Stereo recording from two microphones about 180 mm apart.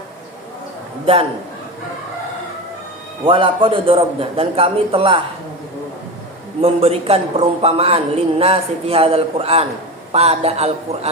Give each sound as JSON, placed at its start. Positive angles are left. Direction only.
{"t": 3.2, "sound": "a man's voice", "side_deg": -30}
{"t": 6.6, "sound": "a man's voice", "side_deg": -35}